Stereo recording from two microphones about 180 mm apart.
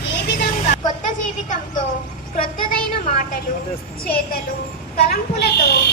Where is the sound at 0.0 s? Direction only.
70° left (ahead or behind).